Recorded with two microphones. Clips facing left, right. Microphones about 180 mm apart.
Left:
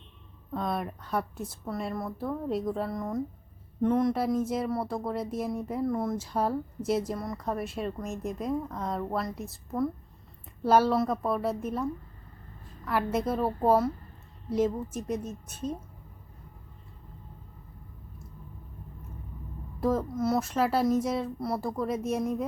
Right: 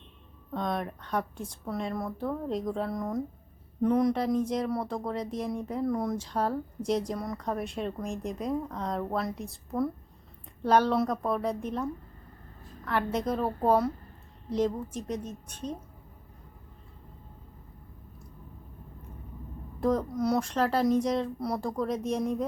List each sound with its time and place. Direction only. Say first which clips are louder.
0.5 s a woman's voice: even; 5° left (ahead or behind)
19.8 s speech: even; 5° left (ahead or behind)